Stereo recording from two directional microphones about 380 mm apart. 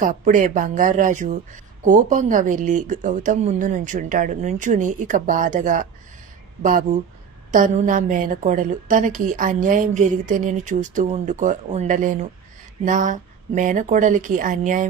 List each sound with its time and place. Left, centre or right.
0.0 s a woman's voice: right